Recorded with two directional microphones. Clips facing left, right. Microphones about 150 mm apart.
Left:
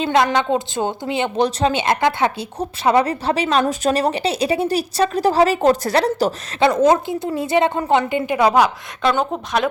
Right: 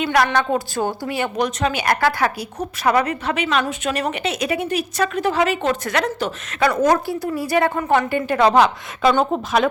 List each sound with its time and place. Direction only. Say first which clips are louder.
0.0 s a woman's voice: left 1 dB; 25° left (ahead or behind)
6.6 s a woman's voice: left 2 dB; 25° left (ahead or behind)
9.0 s speech: right 2 dB; 5° right (ahead or behind)